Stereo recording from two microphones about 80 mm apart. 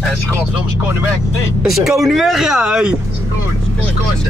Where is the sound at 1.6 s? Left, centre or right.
Centre.